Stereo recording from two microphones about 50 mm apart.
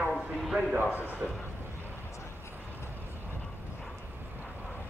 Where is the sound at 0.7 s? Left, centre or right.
Left.